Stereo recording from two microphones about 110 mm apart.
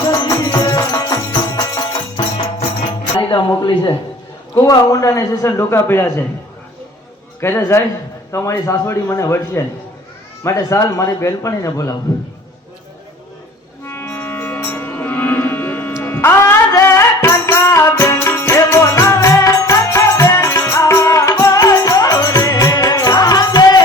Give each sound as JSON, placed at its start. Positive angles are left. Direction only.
{"t": 0.1, "sound": "music", "side_deg": 35}
{"t": 3.2, "sound": "a sound", "side_deg": 45}
{"t": 4.5, "sound": "a man's voice", "side_deg": 30}
{"t": 7.4, "sound": "a man's voice", "side_deg": 25}
{"t": 13.8, "sound": "music", "side_deg": 25}